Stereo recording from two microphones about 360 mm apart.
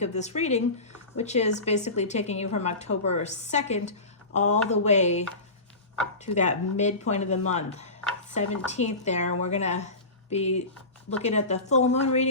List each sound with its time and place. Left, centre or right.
0.0 s speech: centre
6.2 s speech: centre